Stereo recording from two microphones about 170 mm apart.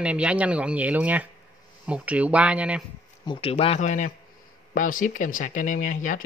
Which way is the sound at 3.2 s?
30° left (ahead or behind).